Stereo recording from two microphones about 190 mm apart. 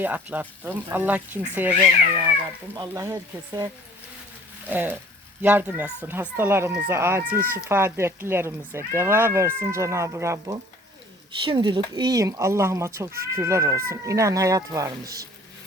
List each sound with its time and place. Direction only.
0.0 s speech: 10° right (ahead or behind)
2.7 s speech: 15° right (ahead or behind)
4.7 s speech: 10° right (ahead or behind)